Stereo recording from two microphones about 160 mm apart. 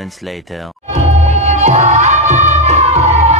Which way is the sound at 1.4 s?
45° right (ahead or behind).